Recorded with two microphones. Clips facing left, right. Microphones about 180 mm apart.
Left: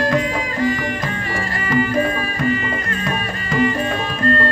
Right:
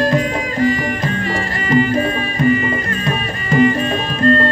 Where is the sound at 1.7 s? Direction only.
20° right (ahead or behind).